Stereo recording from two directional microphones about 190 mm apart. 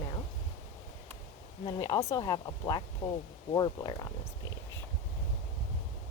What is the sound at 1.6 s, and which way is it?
Speech, 25° left (ahead or behind).